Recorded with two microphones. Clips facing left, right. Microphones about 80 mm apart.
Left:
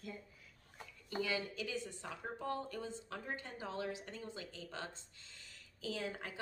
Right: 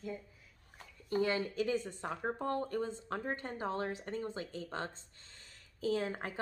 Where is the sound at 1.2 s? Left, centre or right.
Right.